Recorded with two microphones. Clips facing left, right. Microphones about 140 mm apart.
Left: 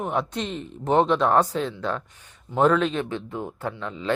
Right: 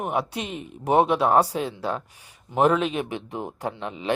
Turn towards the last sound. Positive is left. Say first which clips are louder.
# even
turn(degrees=-15)  # may be behind; listen again after turning